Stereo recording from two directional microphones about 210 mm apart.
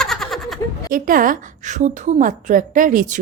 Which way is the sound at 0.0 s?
Centre (ahead or behind).